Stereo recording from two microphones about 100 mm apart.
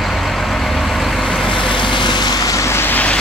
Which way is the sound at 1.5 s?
55° left (ahead or behind).